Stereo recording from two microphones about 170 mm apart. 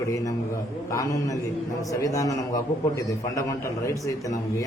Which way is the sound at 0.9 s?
20° left (ahead or behind).